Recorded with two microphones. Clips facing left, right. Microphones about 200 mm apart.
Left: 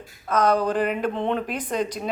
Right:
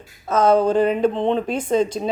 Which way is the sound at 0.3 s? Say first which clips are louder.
Right 5 dB; 25° right (ahead or behind).